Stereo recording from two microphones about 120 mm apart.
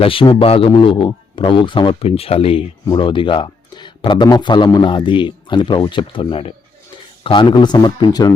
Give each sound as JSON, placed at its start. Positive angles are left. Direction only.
{"t": 0.0, "sound": "speech", "side_deg": 50}